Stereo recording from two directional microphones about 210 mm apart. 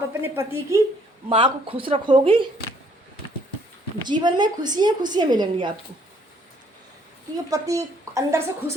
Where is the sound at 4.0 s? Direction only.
20° right (ahead or behind).